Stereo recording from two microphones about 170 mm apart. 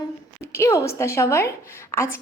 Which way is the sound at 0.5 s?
15° left (ahead or behind).